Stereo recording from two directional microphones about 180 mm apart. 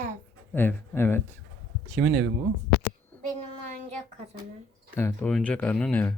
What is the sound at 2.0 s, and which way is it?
Speech, 10° right (ahead or behind).